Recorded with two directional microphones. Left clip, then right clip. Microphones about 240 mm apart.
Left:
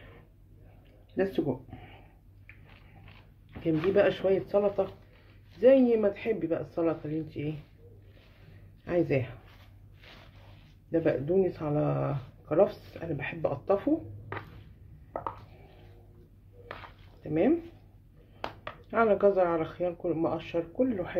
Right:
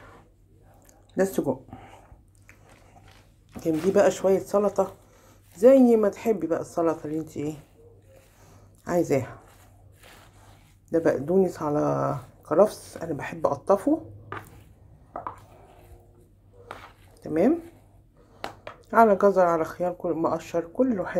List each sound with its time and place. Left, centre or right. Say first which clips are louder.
1.1 s speech: right 5 dB; centre
3.5 s speech: right 4 dB; centre
8.8 s speech: right 4 dB; centre
10.9 s speech: right 4 dB; centre
18.8 s speech: right 7 dB; centre